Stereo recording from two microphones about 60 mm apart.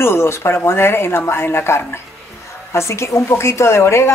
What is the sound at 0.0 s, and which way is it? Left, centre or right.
Speech, left.